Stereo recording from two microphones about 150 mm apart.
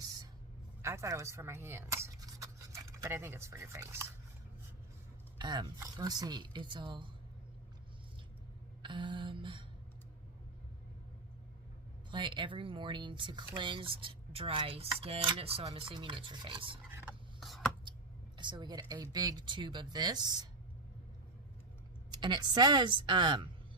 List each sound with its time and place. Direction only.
0.8 s speech: 20° right (ahead or behind)
5.4 s speech: 30° right (ahead or behind)
8.8 s a sound: 30° right (ahead or behind)
12.1 s speech: 30° right (ahead or behind)
17.4 s writing: centre (ahead or behind)
18.3 s a woman's voice: 30° right (ahead or behind)
22.1 s speech: 30° right (ahead or behind)